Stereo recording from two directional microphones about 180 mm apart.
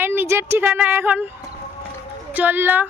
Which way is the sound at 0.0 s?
10° right (ahead or behind).